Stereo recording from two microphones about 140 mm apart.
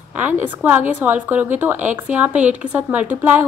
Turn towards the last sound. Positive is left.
turn(degrees=-10)  # may be behind; listen again after turning